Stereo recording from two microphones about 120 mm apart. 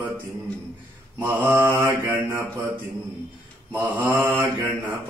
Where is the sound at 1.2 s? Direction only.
20° right (ahead or behind).